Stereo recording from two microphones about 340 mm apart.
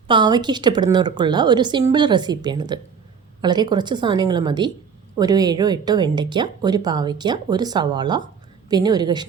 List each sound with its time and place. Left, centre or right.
0.1 s speech: centre